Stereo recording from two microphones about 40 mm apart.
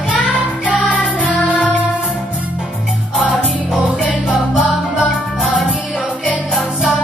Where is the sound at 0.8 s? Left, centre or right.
Left.